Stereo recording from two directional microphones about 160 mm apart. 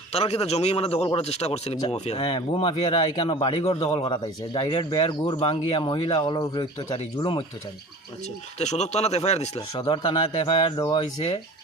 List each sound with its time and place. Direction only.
0.1 s speech: 40° left (ahead or behind)
8.5 s speech: 45° left (ahead or behind)
9.6 s speech: 30° left (ahead or behind)